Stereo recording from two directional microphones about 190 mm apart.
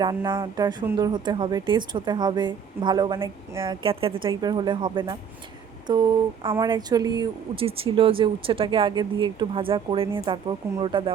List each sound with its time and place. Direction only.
0.0 s speech: 20° right (ahead or behind)